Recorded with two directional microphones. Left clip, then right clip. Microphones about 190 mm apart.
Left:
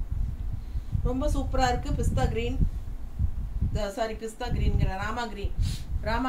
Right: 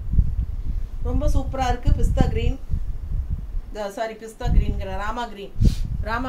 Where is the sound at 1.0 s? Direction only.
10° right (ahead or behind).